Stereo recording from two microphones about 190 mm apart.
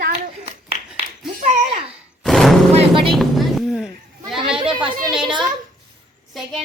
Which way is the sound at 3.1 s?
Centre (ahead or behind).